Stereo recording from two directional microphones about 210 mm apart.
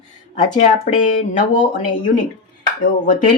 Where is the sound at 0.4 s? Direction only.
35° left (ahead or behind).